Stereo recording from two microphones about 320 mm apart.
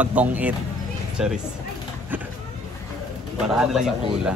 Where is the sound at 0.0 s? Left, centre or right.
Centre.